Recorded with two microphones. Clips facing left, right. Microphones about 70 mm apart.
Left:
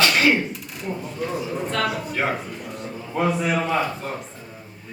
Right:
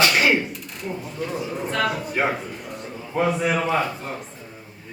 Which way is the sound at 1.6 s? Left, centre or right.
Centre.